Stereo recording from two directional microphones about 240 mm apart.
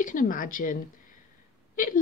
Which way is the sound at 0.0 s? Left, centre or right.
Left.